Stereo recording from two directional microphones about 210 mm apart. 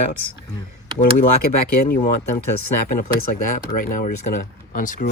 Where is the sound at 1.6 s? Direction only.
45° left (ahead or behind).